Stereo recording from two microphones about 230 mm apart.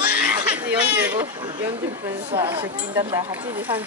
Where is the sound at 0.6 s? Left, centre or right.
Centre.